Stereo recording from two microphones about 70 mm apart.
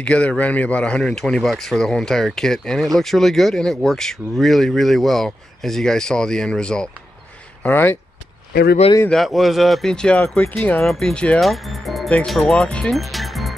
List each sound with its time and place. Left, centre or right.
0.0 s speech: centre
7.6 s speech: left
9.1 s speech: centre; by 10.8 s left
10.8 s speech: centre
11.4 s speech: centre
12.6 s speech: centre
12.9 s music: centre